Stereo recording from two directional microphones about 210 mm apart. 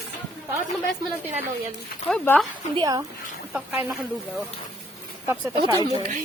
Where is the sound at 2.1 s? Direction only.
5° left (ahead or behind).